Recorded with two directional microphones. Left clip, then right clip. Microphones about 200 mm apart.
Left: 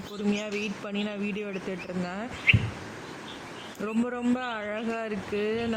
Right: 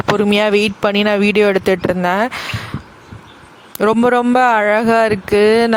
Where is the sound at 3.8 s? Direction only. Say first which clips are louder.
Right 19 dB; 55° right (ahead or behind).